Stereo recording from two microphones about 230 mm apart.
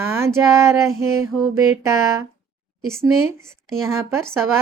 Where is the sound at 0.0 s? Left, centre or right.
Centre.